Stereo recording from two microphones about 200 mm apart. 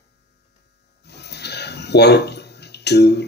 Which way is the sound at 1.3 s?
55° left (ahead or behind).